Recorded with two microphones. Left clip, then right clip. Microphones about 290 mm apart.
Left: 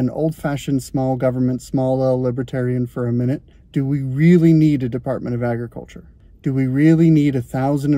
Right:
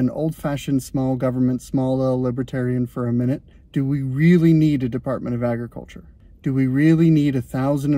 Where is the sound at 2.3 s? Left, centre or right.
Centre.